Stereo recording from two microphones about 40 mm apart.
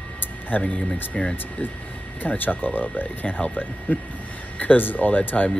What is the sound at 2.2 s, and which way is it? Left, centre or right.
Speech, left.